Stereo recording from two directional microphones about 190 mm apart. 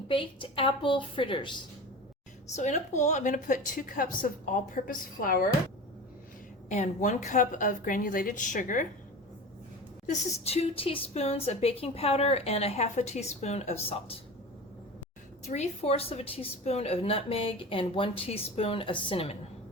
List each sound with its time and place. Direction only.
0.1 s a woman's voice: 25° left (ahead or behind)
2.6 s a woman's voice: 40° left (ahead or behind)
6.7 s a woman's voice: 40° left (ahead or behind)
10.1 s a woman's voice: 35° left (ahead or behind)
15.4 s a woman's voice: 35° left (ahead or behind)